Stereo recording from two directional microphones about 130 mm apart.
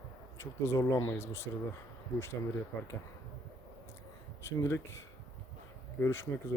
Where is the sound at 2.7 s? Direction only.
15° left (ahead or behind).